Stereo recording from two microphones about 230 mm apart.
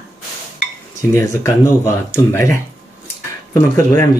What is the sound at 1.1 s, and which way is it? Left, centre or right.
Speech, centre.